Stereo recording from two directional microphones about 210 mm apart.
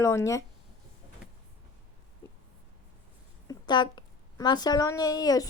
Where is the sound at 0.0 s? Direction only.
15° left (ahead or behind).